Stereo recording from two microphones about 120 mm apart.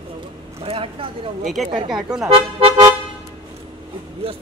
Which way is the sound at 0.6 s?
50° right (ahead or behind).